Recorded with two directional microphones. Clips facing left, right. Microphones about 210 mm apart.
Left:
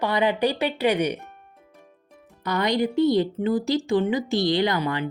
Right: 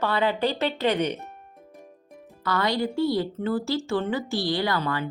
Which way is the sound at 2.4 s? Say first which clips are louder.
Left 2 dB; 20° left (ahead or behind).